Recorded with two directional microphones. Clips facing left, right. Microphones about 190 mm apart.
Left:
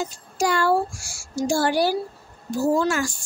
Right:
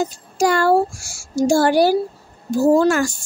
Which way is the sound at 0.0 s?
45° right (ahead or behind).